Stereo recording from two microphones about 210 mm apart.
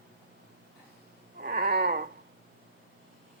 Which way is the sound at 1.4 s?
45° right (ahead or behind).